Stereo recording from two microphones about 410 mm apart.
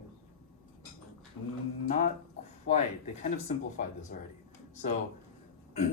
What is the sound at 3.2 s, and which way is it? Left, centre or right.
Speech, centre.